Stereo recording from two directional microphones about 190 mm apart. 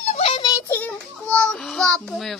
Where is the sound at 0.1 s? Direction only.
30° left (ahead or behind).